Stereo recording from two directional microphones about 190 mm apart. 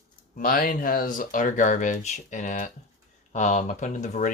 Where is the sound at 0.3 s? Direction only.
50° left (ahead or behind).